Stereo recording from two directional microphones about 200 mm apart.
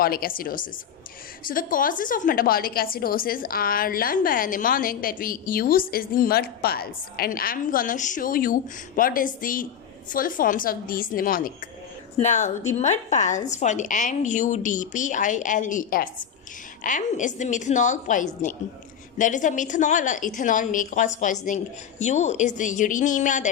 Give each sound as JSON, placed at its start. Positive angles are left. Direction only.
{"t": 0.0, "sound": "a woman's voice", "side_deg": 45}